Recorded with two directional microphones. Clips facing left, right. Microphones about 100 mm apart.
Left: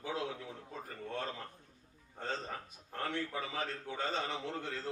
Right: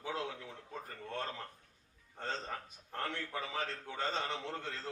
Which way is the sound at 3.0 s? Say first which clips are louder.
Left 2 dB; 15° left (ahead or behind).